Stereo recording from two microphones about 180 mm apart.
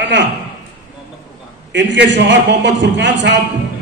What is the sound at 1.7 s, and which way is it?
A man's voice, 80° right.